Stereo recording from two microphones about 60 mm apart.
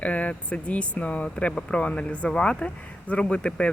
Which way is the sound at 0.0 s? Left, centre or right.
Left.